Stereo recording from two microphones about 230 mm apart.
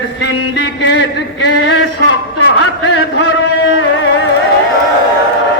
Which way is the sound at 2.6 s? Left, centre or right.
Left.